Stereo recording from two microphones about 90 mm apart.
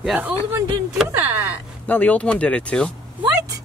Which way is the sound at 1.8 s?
15° left (ahead or behind).